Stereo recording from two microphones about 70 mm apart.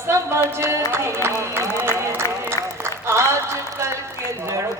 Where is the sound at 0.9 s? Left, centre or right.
Right.